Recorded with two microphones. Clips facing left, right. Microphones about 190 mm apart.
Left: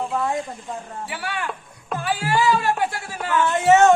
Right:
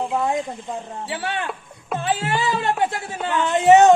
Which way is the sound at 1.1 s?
25° right (ahead or behind).